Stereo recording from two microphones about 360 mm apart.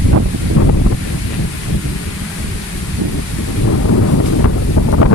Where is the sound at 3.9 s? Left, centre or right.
Left.